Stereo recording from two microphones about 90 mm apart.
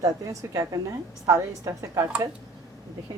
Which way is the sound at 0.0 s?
35° right (ahead or behind).